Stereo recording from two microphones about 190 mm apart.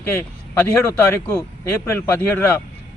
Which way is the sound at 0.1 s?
10° left (ahead or behind).